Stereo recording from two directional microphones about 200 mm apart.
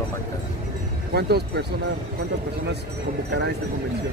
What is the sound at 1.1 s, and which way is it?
Speech, 55° right (ahead or behind).